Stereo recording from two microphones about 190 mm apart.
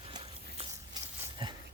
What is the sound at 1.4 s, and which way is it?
Dog, 30° right (ahead or behind).